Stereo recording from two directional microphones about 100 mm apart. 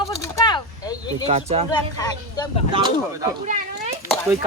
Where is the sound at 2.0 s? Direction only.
45° left (ahead or behind).